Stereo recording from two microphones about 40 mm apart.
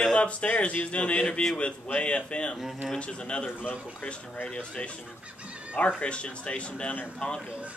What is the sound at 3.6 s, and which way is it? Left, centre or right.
Speech, left.